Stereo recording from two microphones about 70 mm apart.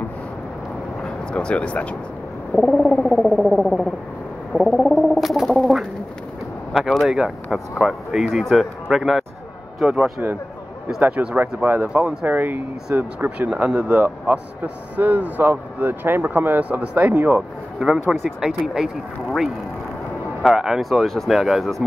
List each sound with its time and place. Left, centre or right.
1.0 s speech: centre
4.5 s frog: centre
6.7 s a sound: centre
7.1 s speech: centre
10.2 s speech: right
13.5 s speech: centre
17.7 s speech: centre
20.5 s speech: centre